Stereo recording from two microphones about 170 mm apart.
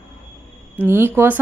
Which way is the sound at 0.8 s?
15° right (ahead or behind).